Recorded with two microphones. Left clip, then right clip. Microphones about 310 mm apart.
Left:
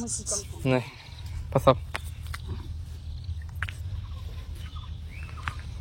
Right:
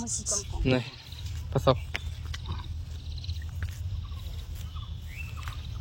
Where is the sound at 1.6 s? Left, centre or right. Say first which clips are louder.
Left 4 dB; centre.